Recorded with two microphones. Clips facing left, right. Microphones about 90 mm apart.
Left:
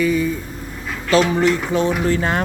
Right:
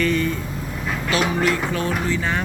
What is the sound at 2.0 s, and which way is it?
Music, 45° left (ahead or behind).